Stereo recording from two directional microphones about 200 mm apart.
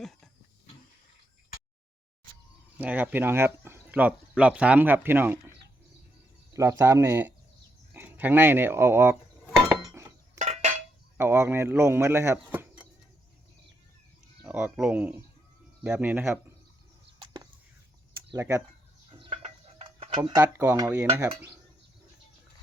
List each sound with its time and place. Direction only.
0.0 s a sound: centre (ahead or behind)
2.7 s speech: 10° right (ahead or behind)
7.9 s cutlery: 10° right (ahead or behind)
10.3 s a sound: 35° right (ahead or behind)
11.2 s speech: 10° right (ahead or behind)
14.4 s speech: 5° right (ahead or behind)
17.2 s chop: 20° right (ahead or behind)
18.3 s speech: 15° right (ahead or behind)
19.2 s a sound: 30° right (ahead or behind)
20.4 s speech: 10° right (ahead or behind)